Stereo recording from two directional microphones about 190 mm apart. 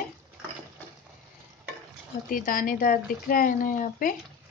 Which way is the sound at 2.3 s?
50° left (ahead or behind).